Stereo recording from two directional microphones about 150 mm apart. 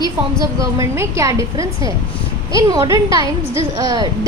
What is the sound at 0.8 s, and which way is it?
A woman's voice, 20° right (ahead or behind).